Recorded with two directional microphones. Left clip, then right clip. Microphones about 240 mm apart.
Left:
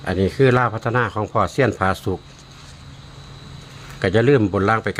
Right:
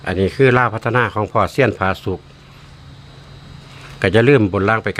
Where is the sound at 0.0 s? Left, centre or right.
Centre.